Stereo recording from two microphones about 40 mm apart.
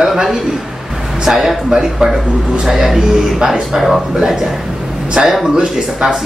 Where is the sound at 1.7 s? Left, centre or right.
Centre.